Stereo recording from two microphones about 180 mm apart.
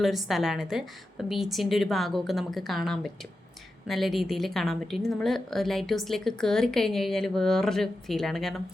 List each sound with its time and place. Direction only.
0.0 s a woman's voice: centre (ahead or behind)